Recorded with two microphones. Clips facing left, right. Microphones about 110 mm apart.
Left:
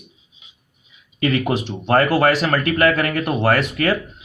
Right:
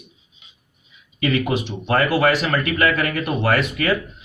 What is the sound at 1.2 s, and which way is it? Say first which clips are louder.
Speech: left 1 dB; 40° left (ahead or behind).